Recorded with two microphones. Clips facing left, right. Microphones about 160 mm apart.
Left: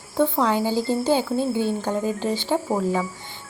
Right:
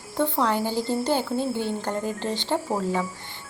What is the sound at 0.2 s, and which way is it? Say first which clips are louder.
Speech: left 3 dB; 10° left (ahead or behind).